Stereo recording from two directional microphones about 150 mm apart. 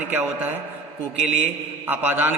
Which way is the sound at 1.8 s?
15° right (ahead or behind).